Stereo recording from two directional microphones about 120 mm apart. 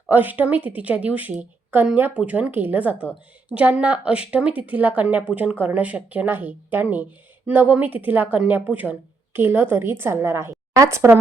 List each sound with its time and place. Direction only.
0.1 s speech: 15° right (ahead or behind)